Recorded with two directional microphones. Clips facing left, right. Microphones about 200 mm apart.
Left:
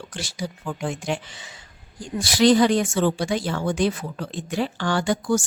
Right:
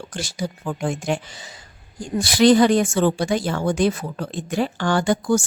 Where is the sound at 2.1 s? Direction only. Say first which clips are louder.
Right 3 dB; 55° right (ahead or behind).